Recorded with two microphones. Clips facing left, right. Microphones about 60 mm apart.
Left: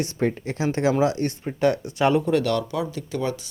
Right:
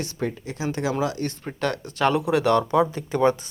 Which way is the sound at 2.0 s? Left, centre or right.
Centre.